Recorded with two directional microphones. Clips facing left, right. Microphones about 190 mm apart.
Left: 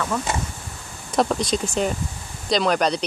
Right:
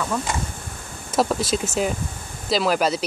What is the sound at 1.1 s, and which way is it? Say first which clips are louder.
Speech: even; 5° right (ahead or behind).